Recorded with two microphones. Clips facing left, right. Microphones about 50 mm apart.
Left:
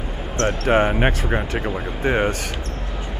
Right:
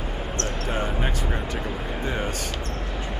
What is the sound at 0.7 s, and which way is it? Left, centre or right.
Speech, left.